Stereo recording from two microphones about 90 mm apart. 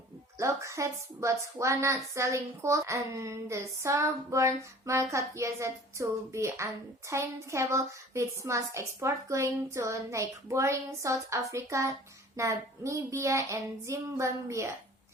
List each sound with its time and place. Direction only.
0.3 s a woman's voice: 35° right (ahead or behind)